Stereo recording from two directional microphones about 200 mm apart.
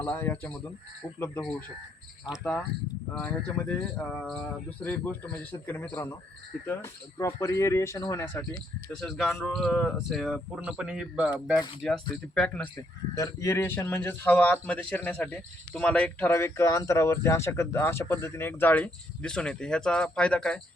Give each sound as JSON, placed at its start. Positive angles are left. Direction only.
{"t": 0.0, "sound": "speech", "side_deg": 10}
{"t": 3.8, "sound": "speech", "side_deg": 15}
{"t": 4.1, "sound": "speech", "side_deg": 5}
{"t": 11.8, "sound": "speech", "side_deg": 5}
{"t": 13.1, "sound": "speech", "side_deg": 15}